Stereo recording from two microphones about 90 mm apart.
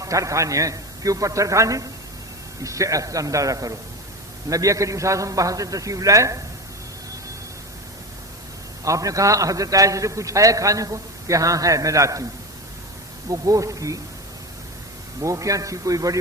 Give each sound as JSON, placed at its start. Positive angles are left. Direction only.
{"t": 0.0, "sound": "a man's voice", "side_deg": -35}
{"t": 8.8, "sound": "a man's voice", "side_deg": -40}
{"t": 13.2, "sound": "a man's voice", "side_deg": -40}
{"t": 15.2, "sound": "a man's voice", "side_deg": -35}